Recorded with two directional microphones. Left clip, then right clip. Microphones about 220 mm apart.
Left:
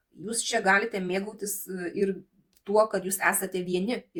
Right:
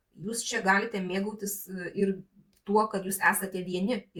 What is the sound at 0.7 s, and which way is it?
Speech, 40° left (ahead or behind).